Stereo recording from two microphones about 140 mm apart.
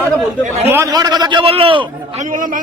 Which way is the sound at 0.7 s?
25° right (ahead or behind).